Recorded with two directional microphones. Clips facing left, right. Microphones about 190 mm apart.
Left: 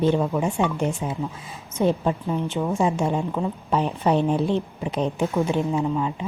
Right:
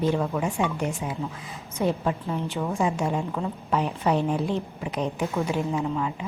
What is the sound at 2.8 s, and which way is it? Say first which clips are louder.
A woman's voice: left 2 dB; 30° left (ahead or behind).